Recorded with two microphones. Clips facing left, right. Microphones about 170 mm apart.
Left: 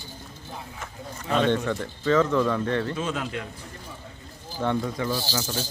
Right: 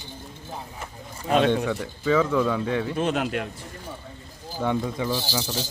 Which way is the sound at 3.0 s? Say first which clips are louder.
Right 5 dB; 65° right (ahead or behind).